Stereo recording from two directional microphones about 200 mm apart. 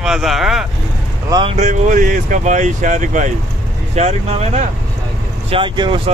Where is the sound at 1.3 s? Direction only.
30° right (ahead or behind).